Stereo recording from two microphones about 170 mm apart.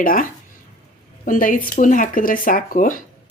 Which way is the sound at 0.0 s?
55° left (ahead or behind).